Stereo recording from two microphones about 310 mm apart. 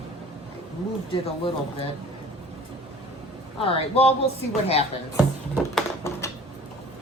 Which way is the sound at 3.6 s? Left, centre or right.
Centre.